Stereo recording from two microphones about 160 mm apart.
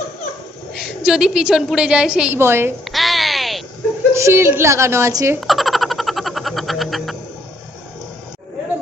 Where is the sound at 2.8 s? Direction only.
Centre (ahead or behind).